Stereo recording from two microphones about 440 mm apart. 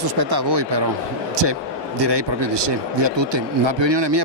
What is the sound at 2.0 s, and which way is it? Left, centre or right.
Speech, right.